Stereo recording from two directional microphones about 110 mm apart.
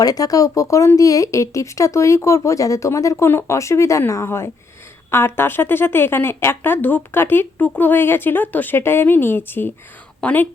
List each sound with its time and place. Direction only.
0.0 s a woman's voice: 35° left (ahead or behind); by 10.5 s 15° left (ahead or behind)